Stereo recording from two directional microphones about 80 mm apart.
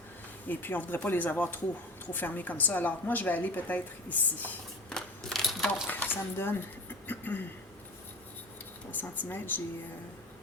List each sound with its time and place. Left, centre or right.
0.4 s a woman's voice: left
4.9 s coin: centre
5.9 s speech: left
7.1 s a sound: left
8.9 s a woman's voice: left